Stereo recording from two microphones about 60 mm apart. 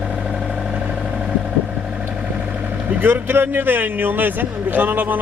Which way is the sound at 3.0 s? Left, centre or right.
Right.